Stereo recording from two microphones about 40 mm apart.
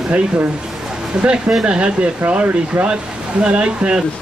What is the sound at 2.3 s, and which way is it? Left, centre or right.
Speech, right.